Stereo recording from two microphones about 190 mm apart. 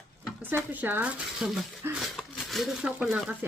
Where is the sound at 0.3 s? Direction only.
10° right (ahead or behind).